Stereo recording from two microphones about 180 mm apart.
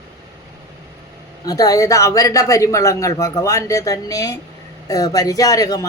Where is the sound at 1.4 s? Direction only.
20° left (ahead or behind).